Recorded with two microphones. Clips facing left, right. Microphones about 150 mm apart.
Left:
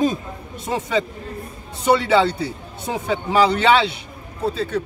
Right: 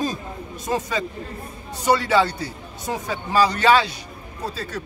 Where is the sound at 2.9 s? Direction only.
20° left (ahead or behind).